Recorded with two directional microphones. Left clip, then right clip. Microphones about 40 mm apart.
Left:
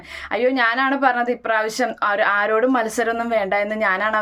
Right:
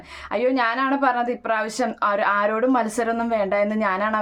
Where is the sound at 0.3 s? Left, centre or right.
Centre.